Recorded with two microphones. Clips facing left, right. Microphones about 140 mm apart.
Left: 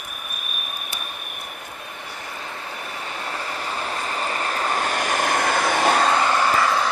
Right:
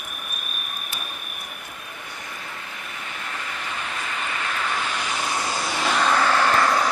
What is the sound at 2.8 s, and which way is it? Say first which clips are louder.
Vehicle: left 4 dB; 35° left (ahead or behind).